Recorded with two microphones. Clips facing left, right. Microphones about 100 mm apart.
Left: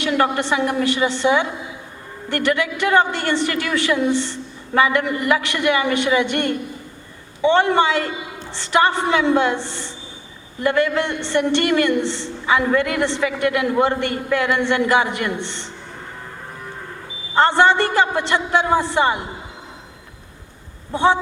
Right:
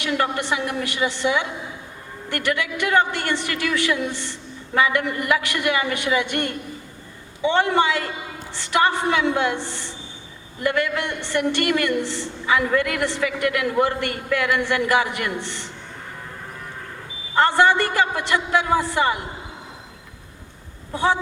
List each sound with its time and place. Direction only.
0.0 s a woman's voice: 35° left (ahead or behind)
17.3 s a man's voice: 30° left (ahead or behind)
20.9 s a man's voice: 25° left (ahead or behind)